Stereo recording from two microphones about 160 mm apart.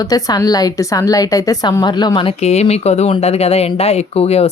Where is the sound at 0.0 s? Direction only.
20° left (ahead or behind).